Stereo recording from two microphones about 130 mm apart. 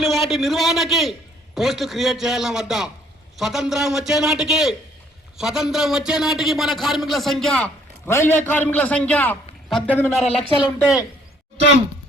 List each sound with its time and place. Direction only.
0.0 s a man's voice: centre (ahead or behind)
8.0 s a man's voice: 20° left (ahead or behind)
9.6 s a man's voice: centre (ahead or behind)
10.2 s speech: 50° left (ahead or behind)